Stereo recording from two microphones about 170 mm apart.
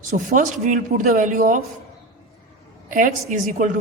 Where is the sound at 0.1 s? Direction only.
45° right (ahead or behind).